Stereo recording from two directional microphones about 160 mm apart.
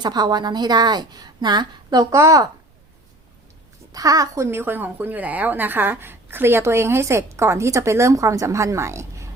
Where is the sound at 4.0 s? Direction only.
20° right (ahead or behind).